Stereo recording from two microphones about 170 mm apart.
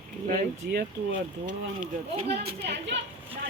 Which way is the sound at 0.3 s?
65° right (ahead or behind).